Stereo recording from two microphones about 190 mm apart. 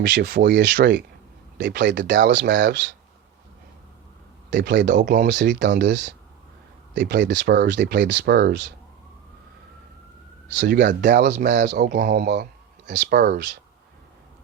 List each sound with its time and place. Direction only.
0.0 s speech: 65° right (ahead or behind)
4.5 s speech: 65° right (ahead or behind)
10.5 s speech: 65° right (ahead or behind)
10.8 s speech: 45° right (ahead or behind)
11.2 s speech: 60° right (ahead or behind)